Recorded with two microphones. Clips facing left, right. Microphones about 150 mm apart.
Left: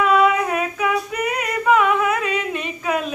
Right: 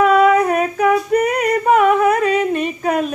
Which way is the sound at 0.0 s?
45° right (ahead or behind).